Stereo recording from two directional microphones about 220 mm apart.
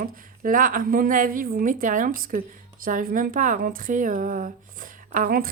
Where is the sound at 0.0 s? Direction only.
40° right (ahead or behind).